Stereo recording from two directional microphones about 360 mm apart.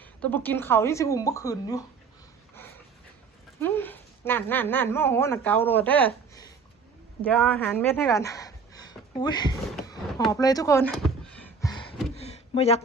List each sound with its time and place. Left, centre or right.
0.0 s speech: centre
3.6 s a woman's voice: centre
9.7 s a sound: centre